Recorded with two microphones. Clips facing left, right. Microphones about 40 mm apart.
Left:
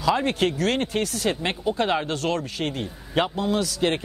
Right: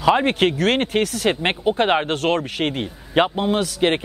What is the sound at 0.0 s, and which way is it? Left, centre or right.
Speech, right.